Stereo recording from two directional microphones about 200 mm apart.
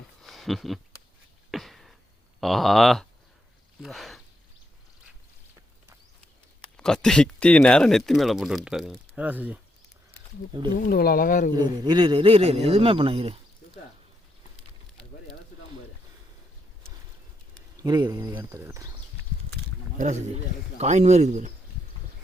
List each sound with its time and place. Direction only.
0.2 s a sound: centre (ahead or behind)
2.4 s speech: centre (ahead or behind)
6.6 s speech: 5° left (ahead or behind)
10.8 s speech: 45° left (ahead or behind)
11.5 s a man's voice: 20° right (ahead or behind)
17.7 s speech: 20° right (ahead or behind)
20.0 s a man's voice: 35° right (ahead or behind)